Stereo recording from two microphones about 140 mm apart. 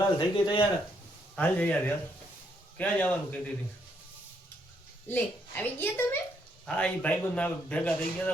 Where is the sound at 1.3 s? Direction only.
15° left (ahead or behind).